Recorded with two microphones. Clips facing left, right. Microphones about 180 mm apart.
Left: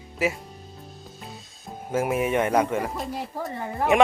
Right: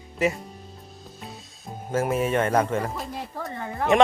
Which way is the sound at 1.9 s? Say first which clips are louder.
Even; 10° left (ahead or behind).